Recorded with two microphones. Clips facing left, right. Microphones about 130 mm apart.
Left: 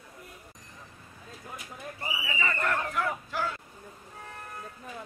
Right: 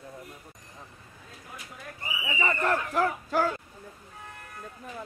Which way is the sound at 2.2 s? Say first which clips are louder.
Right 4 dB; 20° right (ahead or behind).